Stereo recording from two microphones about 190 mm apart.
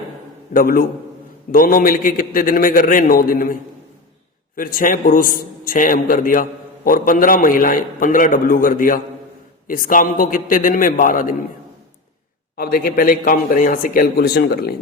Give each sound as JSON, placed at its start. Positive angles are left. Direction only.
{"t": 0.5, "sound": "a man's voice", "side_deg": 50}
{"t": 12.5, "sound": "a man's voice", "side_deg": 50}